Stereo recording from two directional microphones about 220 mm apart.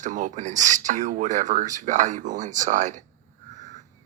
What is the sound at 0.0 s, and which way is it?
Speech, 35° right (ahead or behind).